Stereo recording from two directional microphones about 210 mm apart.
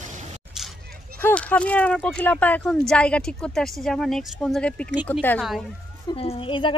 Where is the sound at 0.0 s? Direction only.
35° right (ahead or behind).